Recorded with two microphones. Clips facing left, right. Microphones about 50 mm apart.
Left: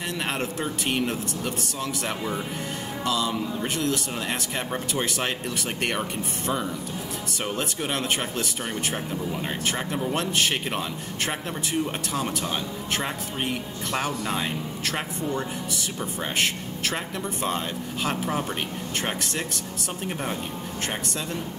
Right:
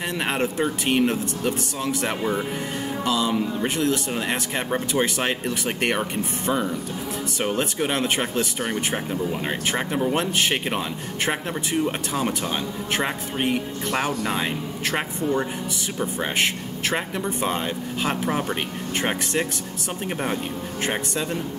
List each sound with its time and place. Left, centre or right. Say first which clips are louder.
0.3 s speech: right 5 dB; centre
16.9 s speech: right 4 dB; centre